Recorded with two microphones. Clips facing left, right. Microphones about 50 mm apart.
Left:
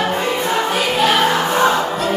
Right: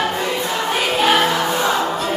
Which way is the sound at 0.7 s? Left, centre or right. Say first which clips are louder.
Right 2 dB; centre.